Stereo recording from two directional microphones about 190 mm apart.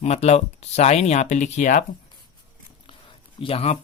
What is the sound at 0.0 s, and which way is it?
Speech, 35° left (ahead or behind).